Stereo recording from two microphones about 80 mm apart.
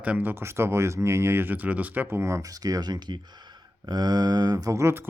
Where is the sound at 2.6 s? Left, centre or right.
Right.